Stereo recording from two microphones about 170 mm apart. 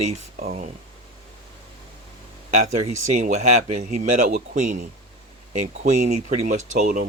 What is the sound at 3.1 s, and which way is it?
Speech, 45° right (ahead or behind).